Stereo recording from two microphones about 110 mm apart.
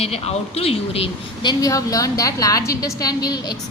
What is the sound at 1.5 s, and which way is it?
A woman's voice, 35° left (ahead or behind).